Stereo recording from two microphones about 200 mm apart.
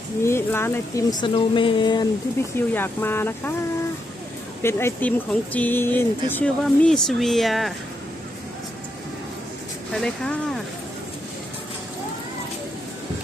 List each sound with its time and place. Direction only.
0.2 s speech: 15° left (ahead or behind)
1.2 s a sound: 25° left (ahead or behind)
2.6 s speech: 10° left (ahead or behind)
4.6 s speech: 10° left (ahead or behind)
9.9 s speech: 5° left (ahead or behind)